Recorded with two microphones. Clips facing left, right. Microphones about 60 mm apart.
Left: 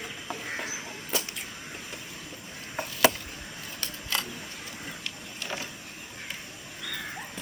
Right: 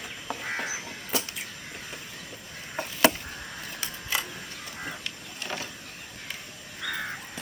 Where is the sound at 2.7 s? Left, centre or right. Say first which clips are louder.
Right 1 dB; centre.